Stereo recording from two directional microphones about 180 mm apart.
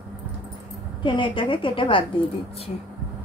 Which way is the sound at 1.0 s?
25° left (ahead or behind).